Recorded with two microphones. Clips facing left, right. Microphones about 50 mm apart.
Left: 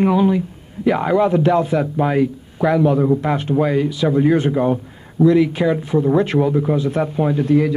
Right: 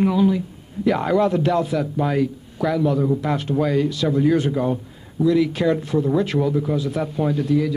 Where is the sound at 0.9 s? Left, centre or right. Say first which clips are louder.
Left 3 dB; centre.